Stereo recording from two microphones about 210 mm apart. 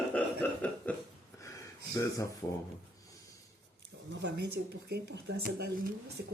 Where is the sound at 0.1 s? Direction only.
5° left (ahead or behind).